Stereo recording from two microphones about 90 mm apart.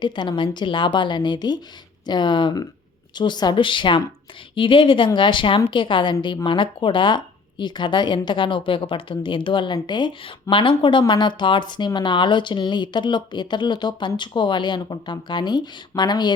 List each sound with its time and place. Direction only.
0.0 s a woman's voice: 60° left (ahead or behind)
9.7 s a woman's voice: 55° left (ahead or behind)